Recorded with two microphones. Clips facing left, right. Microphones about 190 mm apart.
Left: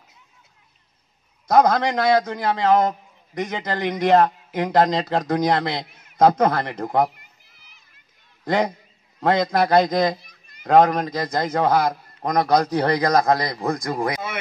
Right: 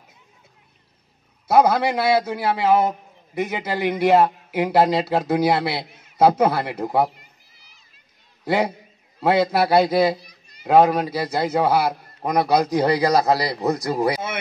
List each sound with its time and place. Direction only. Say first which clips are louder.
1.5 s a man's voice: even; 10° right (ahead or behind)
7.5 s a sound: even; 55° left (ahead or behind)
8.5 s a man's voice: even; 10° right (ahead or behind)